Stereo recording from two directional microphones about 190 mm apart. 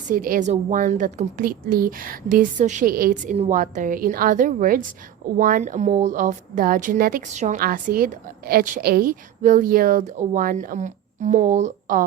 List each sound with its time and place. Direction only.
0.1 s a woman's voice: 45° right (ahead or behind)
3.3 s a woman's voice: 40° right (ahead or behind)